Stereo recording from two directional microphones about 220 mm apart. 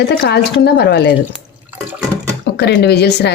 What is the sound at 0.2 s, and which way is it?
Speech, 50° left (ahead or behind).